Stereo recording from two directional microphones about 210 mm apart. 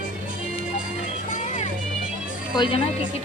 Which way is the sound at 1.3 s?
35° left (ahead or behind).